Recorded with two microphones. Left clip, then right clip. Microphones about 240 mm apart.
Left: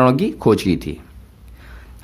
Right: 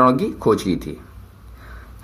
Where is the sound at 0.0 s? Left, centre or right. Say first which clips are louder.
Even; left.